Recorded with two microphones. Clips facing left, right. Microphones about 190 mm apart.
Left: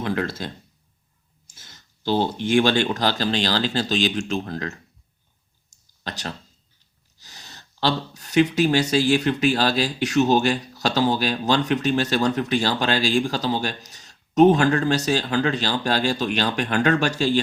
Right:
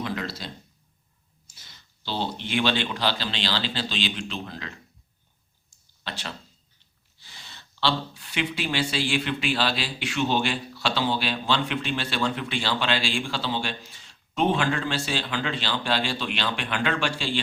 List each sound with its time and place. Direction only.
0.0 s speech: 50° left (ahead or behind)
6.0 s speech: 45° left (ahead or behind)